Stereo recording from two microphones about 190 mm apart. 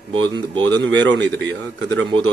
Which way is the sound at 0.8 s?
75° right (ahead or behind).